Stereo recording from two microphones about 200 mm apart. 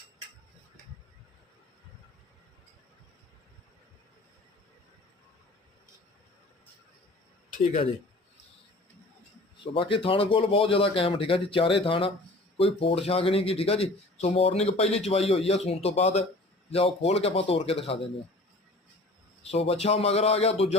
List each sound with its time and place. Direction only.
9.7 s a man's voice: 25° left (ahead or behind)
19.4 s a man's voice: 30° left (ahead or behind)